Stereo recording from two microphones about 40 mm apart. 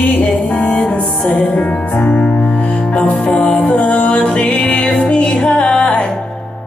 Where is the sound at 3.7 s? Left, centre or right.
Left.